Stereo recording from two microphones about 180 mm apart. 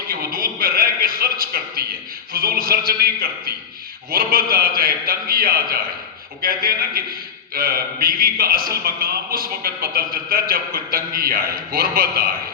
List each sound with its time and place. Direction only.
0.1 s speech: 55° right (ahead or behind)